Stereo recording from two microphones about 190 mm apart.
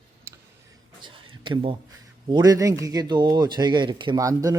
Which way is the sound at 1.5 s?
25° right (ahead or behind).